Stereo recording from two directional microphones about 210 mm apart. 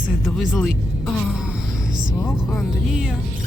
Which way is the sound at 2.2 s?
Centre (ahead or behind).